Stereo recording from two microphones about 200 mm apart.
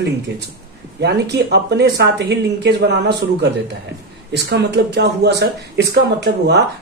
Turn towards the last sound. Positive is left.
turn(degrees=-55)  # may be behind; listen again after turning